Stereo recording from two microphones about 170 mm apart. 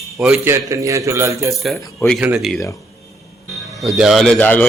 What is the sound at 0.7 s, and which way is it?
Speech, 20° right (ahead or behind).